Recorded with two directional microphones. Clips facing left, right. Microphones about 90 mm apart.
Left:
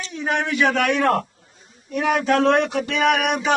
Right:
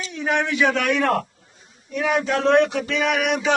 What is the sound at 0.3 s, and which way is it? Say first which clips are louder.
Speech: even; 40° left (ahead or behind).